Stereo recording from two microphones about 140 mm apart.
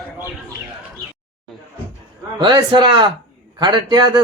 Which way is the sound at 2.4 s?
30° right (ahead or behind).